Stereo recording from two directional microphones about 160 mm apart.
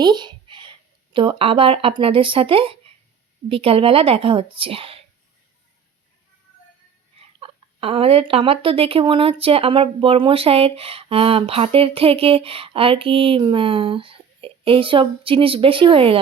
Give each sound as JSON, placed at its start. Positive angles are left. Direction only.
{"t": 0.0, "sound": "speech", "side_deg": -30}
{"t": 7.3, "sound": "speech", "side_deg": -35}